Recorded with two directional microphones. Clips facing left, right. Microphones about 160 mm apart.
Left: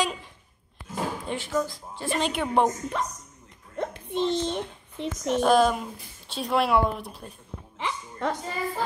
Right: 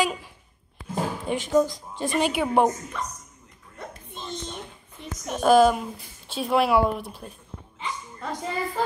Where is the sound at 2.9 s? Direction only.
65° left (ahead or behind).